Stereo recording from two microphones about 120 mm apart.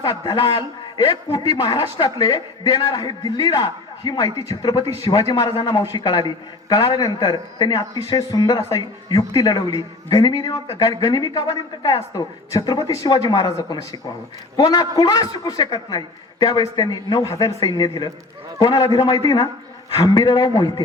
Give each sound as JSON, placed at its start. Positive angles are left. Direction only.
{"t": 0.3, "sound": "a man's voice", "side_deg": 50}
{"t": 1.3, "sound": "a man's voice", "side_deg": 30}
{"t": 6.0, "sound": "a man's voice", "side_deg": 40}